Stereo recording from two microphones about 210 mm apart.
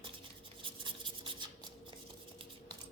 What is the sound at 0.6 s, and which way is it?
Writing, 25° right (ahead or behind).